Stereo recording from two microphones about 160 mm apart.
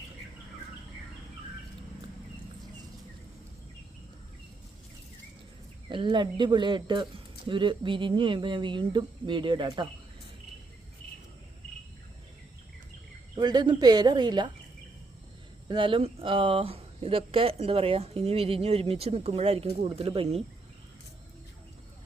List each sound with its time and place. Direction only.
5.9 s speech: 30° right (ahead or behind)
13.3 s speech: 25° right (ahead or behind)
15.7 s speech: 35° right (ahead or behind)